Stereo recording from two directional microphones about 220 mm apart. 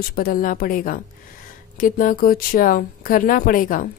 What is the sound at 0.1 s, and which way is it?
Speech, 40° left (ahead or behind).